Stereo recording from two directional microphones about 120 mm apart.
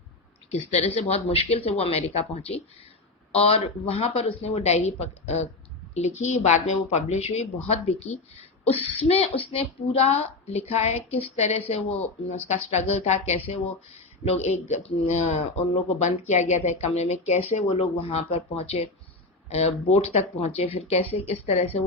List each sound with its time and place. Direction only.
0.5 s speech: 60° left (ahead or behind)
6.1 s speech: 75° left (ahead or behind)
8.6 s speech: 55° left (ahead or behind)